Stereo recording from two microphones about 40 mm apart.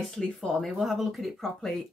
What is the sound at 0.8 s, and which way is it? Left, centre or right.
Speech, centre.